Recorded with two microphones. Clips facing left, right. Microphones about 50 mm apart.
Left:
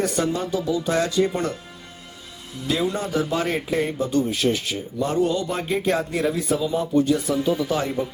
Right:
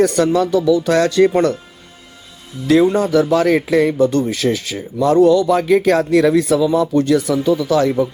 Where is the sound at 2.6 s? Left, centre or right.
Right.